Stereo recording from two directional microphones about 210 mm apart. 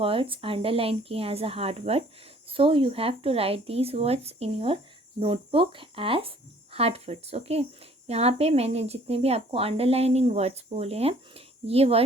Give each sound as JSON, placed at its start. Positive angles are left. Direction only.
{"t": 0.0, "sound": "speech", "side_deg": -25}